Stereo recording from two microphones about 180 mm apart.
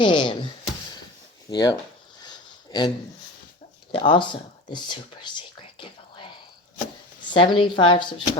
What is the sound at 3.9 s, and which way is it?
Speech, 30° left (ahead or behind).